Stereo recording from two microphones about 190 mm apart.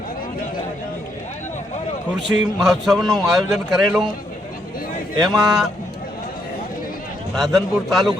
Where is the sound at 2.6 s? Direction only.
Centre (ahead or behind).